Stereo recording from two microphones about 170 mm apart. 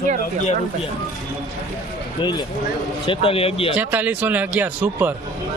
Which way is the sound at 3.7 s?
10° right (ahead or behind).